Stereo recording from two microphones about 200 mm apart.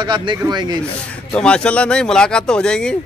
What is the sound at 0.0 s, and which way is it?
Speech, 25° right (ahead or behind).